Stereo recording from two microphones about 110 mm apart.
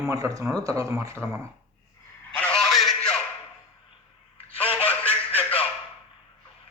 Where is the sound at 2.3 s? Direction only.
10° left (ahead or behind).